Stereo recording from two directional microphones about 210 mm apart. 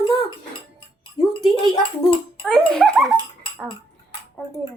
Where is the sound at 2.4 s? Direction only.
Centre (ahead or behind).